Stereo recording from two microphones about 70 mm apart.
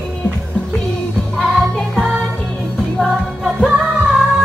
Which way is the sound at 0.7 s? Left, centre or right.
Centre.